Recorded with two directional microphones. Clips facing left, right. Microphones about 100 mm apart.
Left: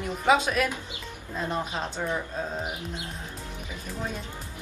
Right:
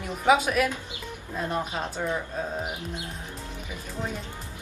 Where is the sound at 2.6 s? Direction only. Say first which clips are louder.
Right 1 dB; 20° right (ahead or behind).